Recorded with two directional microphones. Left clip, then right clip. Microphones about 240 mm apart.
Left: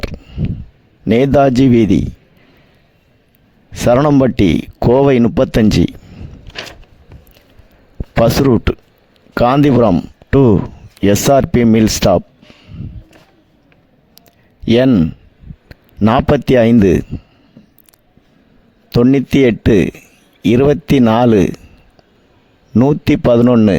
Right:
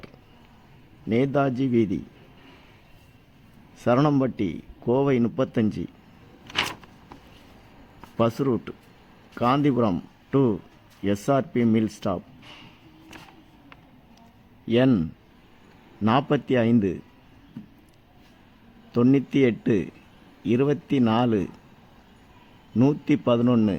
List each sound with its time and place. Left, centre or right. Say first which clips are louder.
1.0 s speech: left 13 dB; left
3.8 s speech: left 11 dB; left
8.2 s speech: left 12 dB; left
14.2 s a sound: left 6 dB; left
16.0 s speech: left 11 dB; left
18.9 s speech: left 10 dB; left
22.7 s speech: left 10 dB; left